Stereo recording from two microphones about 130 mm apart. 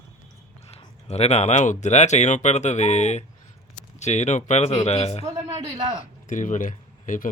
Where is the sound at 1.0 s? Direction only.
55° left (ahead or behind).